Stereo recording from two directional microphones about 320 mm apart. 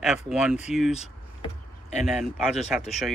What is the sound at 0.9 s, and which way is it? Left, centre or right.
Vehicle, centre.